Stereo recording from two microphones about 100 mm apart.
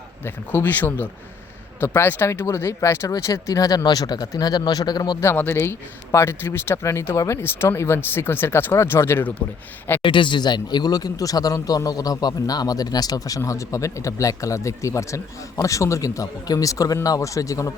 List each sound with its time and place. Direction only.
0.3 s a man's voice: 20° left (ahead or behind); by 5.1 s 45° left (ahead or behind)
5.2 s speech: 20° left (ahead or behind)
10.0 s speech: 55° left (ahead or behind); by 17.7 s 35° left (ahead or behind)